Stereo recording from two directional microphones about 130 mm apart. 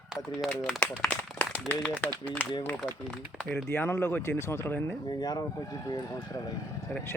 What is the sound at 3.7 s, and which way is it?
Speech, 20° left (ahead or behind).